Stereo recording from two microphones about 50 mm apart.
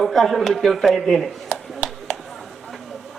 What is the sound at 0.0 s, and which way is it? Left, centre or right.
A man's voice, centre.